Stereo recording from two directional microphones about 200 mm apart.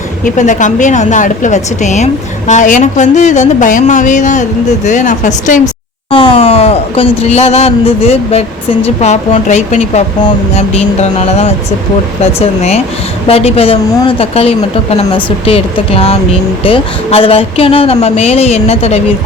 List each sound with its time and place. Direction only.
0.3 s speech: 40° left (ahead or behind)
5.6 s a woman's voice: 25° left (ahead or behind)